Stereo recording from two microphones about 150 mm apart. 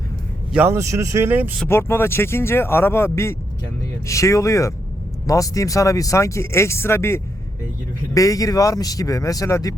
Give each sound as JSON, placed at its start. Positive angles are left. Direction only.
{"t": 0.5, "sound": "speech", "side_deg": -15}
{"t": 1.5, "sound": "speech", "side_deg": 15}